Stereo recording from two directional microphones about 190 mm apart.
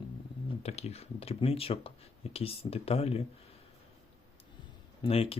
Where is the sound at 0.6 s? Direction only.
35° left (ahead or behind).